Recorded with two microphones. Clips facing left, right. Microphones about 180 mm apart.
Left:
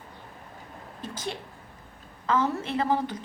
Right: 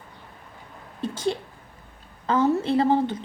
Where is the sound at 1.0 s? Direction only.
30° right (ahead or behind).